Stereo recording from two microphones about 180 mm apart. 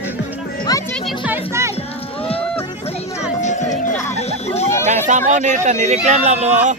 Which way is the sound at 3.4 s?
40° left (ahead or behind).